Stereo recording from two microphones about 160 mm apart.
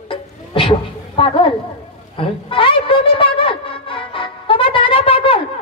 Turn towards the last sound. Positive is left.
turn(degrees=35)  # may be behind; listen again after turning